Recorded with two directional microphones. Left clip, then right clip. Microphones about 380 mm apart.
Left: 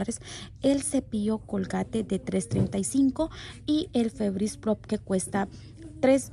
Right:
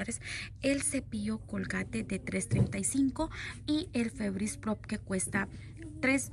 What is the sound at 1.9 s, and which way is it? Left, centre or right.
Speech, right.